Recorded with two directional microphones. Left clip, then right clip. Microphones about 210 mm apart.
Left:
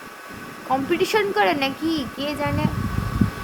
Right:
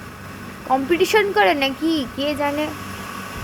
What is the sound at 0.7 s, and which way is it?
A child's voice, 15° right (ahead or behind).